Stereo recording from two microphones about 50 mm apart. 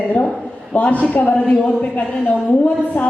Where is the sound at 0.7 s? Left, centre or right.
Left.